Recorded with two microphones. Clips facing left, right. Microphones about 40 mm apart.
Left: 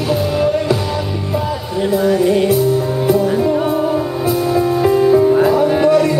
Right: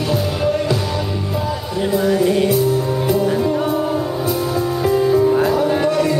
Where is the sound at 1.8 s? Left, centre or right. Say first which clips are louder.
Left 2 dB; centre.